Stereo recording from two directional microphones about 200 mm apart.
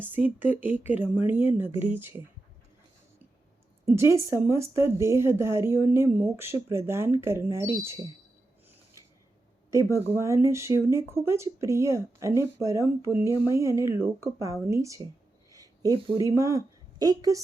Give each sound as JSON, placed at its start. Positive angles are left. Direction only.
{"t": 0.0, "sound": "speech", "side_deg": -10}
{"t": 3.9, "sound": "speech", "side_deg": -15}
{"t": 9.6, "sound": "a woman's voice", "side_deg": -15}